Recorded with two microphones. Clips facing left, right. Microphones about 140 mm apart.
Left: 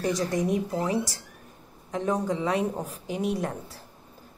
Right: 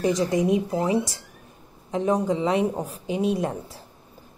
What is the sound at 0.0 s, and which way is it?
A woman's voice, 20° right (ahead or behind).